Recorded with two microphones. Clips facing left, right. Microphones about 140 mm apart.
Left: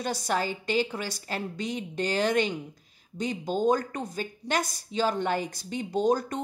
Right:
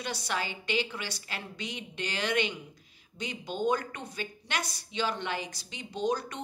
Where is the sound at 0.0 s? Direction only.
45° left (ahead or behind).